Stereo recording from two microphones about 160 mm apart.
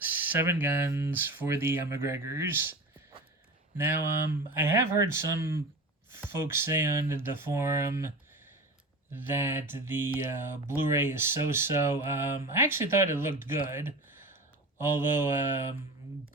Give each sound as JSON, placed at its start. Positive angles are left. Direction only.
{"t": 0.0, "sound": "speech", "side_deg": -10}
{"t": 9.1, "sound": "speech", "side_deg": -15}